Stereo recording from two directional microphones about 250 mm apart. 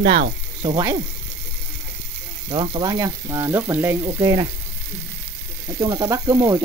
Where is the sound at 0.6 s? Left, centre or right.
Centre.